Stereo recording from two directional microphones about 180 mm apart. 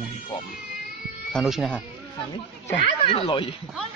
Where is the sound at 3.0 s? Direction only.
30° left (ahead or behind).